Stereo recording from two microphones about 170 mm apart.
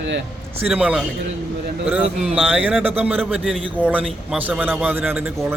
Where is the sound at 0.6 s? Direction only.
10° right (ahead or behind).